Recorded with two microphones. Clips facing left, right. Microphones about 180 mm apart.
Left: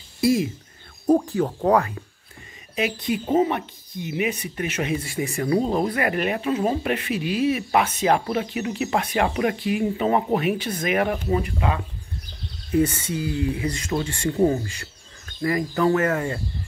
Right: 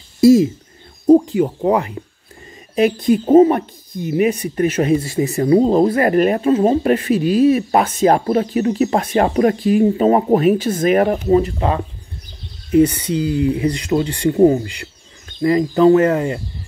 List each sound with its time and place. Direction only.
1.0 s speech: 15° right (ahead or behind)
2.7 s speech: 45° right (ahead or behind)
13.1 s speech: 20° right (ahead or behind)
14.1 s speech: 35° right (ahead or behind)
14.4 s speech: 20° right (ahead or behind)